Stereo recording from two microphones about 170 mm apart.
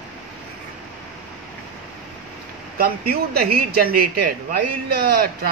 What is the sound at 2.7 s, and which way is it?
Speech, 65° right (ahead or behind).